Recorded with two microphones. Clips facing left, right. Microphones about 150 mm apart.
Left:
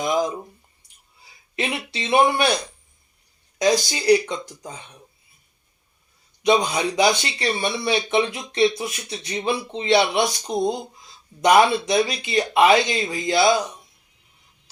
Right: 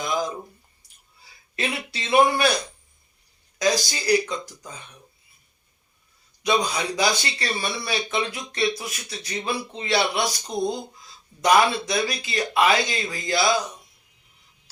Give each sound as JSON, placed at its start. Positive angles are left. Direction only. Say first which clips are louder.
{"t": 0.0, "sound": "a sound", "louder": "left 4 dB", "side_deg": 20}
{"t": 1.5, "sound": "speech", "louder": "left 2 dB", "side_deg": 25}
{"t": 3.6, "sound": "speech", "louder": "left 3 dB", "side_deg": 25}
{"t": 6.4, "sound": "speech", "louder": "left 4 dB", "side_deg": 25}